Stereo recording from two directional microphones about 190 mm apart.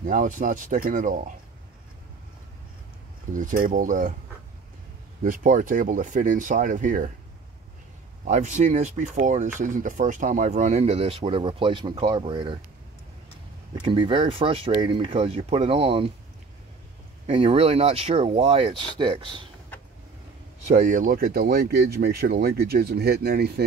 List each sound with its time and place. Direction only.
0.0 s speech: 45° right (ahead or behind)
3.3 s speech: 45° right (ahead or behind)
5.2 s speech: 45° right (ahead or behind)
8.3 s speech: 40° right (ahead or behind)
13.8 s speech: 25° right (ahead or behind)
17.3 s speech: 30° right (ahead or behind)
20.6 s speech: 40° right (ahead or behind); by 23.6 s 55° right (ahead or behind)